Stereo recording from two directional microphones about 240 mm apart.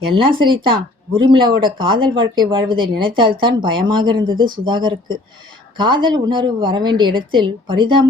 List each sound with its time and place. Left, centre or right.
0.3 s speech: centre